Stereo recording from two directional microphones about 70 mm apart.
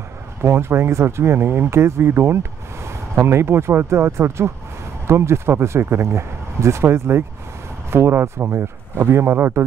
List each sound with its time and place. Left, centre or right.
0.4 s speech: right